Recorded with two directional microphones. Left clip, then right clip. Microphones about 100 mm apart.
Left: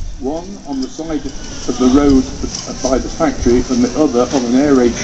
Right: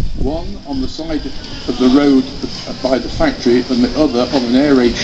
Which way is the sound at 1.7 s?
30° right (ahead or behind).